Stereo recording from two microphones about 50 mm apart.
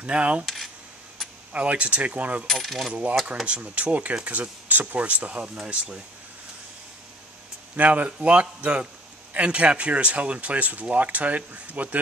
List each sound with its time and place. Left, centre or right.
0.0 s speech: right
1.5 s speech: right
2.4 s coin: centre
2.9 s speech: right
7.7 s speech: right